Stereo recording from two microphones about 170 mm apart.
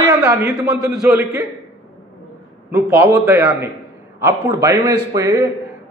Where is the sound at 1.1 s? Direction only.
15° right (ahead or behind).